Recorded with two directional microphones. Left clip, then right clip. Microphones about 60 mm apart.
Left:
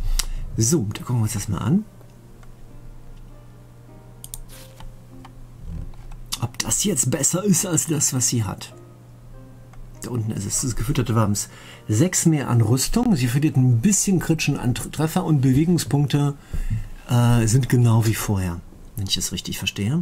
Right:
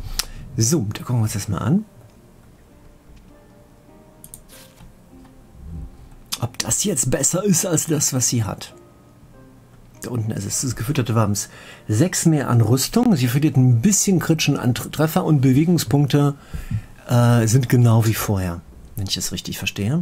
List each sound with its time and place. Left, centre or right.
0.0 s a sound: right
1.2 s speech: centre
6.3 s speech: centre
9.9 s speech: right